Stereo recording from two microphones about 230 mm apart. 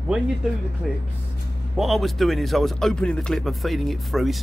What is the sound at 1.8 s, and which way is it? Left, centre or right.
Speech, centre.